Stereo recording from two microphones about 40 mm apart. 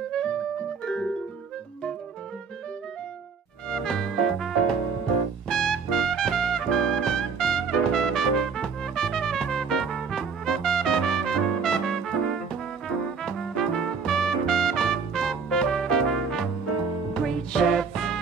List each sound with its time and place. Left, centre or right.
0.1 s music: left
3.7 s music: centre
5.5 s trumpet: centre
12.8 s brass instrument: centre
13.6 s music: centre
17.7 s music: centre